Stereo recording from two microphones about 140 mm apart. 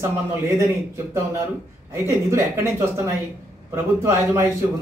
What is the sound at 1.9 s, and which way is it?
Speech, 20° right (ahead or behind).